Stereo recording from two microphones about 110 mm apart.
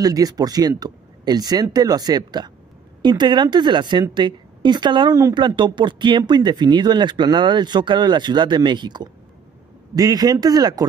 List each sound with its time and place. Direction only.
0.0 s a woman's voice: 35° right (ahead or behind)